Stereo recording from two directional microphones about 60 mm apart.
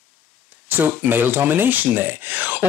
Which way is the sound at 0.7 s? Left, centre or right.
Right.